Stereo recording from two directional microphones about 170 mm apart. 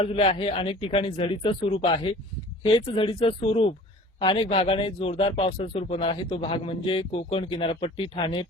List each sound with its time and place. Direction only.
0.0 s speech: 35° left (ahead or behind)